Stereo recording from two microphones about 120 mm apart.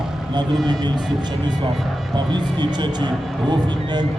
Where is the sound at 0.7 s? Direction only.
35° right (ahead or behind).